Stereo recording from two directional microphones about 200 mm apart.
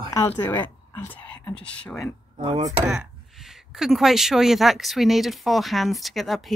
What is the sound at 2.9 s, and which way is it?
A woman's voice, 5° right (ahead or behind).